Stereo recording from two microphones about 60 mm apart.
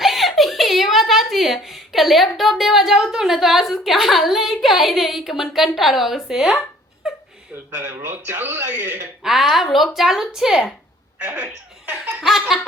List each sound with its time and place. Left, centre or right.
0.0 s a sound: centre
1.6 s a woman's voice: centre
7.0 s a sound: centre
7.7 s speech: right
9.2 s a woman's voice: centre
11.2 s speech: right
12.2 s a woman's voice: centre